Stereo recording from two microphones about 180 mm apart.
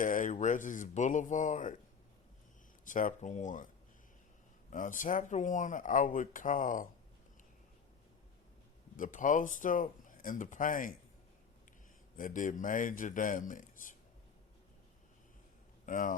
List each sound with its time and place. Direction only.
0.0 s speech: 45° left (ahead or behind)
2.8 s speech: 45° left (ahead or behind)
4.7 s speech: 45° left (ahead or behind)
9.0 s speech: 45° left (ahead or behind)
12.1 s speech: 45° left (ahead or behind)
15.9 s speech: 45° left (ahead or behind)